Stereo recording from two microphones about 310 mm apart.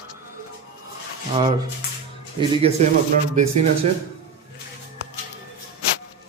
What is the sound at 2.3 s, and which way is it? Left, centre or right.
Speech, centre.